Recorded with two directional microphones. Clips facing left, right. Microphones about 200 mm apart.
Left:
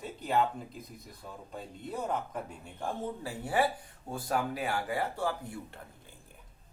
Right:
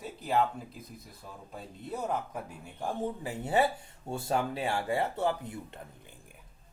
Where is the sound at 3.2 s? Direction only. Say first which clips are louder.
Right 2 dB; 25° right (ahead or behind).